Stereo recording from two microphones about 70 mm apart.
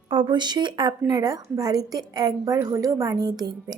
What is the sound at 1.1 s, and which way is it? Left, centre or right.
A woman's voice, right.